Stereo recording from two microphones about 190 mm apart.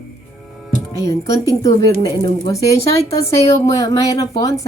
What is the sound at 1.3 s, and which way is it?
Speech, 15° left (ahead or behind).